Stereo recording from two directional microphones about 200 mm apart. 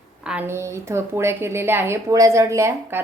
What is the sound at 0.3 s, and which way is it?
A woman's voice, 10° right (ahead or behind).